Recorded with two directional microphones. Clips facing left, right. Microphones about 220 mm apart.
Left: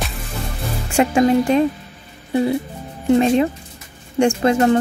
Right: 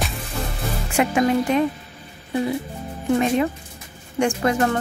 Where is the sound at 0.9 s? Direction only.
30° left (ahead or behind).